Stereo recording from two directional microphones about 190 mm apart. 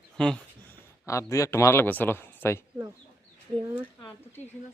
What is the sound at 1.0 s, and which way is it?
Speech, 15° left (ahead or behind).